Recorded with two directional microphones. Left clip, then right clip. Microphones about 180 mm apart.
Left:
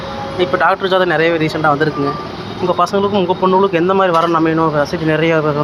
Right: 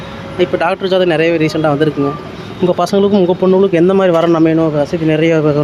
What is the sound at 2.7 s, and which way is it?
Speech, 50° right (ahead or behind).